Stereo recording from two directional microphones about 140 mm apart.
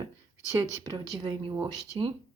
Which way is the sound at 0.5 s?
25° right (ahead or behind).